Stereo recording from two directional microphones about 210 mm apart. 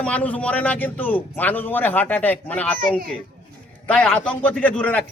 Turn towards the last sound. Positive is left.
turn(degrees=5)  # may be behind; listen again after turning